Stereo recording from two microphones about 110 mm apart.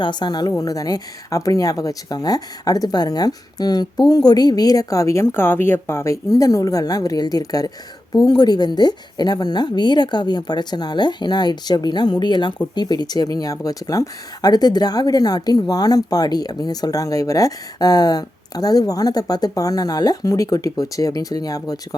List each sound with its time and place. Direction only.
0.0 s speech: 45° left (ahead or behind)